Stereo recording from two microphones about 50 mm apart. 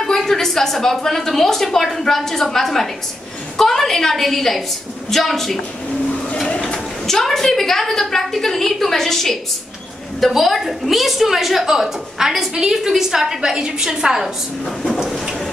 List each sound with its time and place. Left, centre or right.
0.0 s a woman's voice: centre
6.1 s a sound: centre
7.1 s a woman's voice: centre
15.0 s vehicle: centre